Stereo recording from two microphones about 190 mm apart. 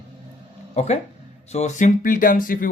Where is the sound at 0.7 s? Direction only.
35° left (ahead or behind).